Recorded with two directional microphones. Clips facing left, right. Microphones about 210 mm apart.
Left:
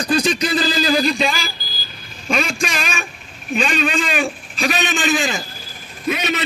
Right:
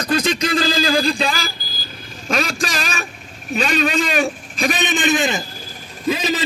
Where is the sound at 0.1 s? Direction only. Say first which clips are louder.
Even; 25° right (ahead or behind).